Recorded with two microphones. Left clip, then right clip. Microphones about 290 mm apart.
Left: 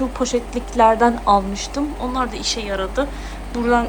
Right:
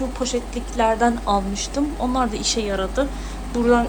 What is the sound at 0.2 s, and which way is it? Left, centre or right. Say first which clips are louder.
Speech: left 4 dB; centre.